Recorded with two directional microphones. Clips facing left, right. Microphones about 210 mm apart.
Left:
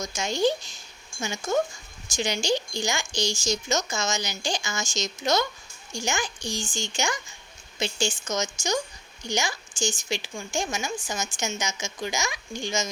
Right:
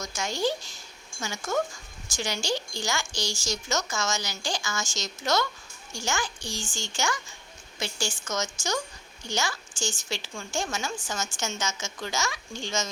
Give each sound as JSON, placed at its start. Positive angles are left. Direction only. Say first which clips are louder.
{"t": 0.0, "sound": "speech", "louder": "left 4 dB", "side_deg": 20}